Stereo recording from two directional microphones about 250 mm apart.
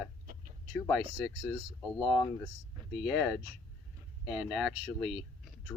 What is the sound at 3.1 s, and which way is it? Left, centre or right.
Speech, centre.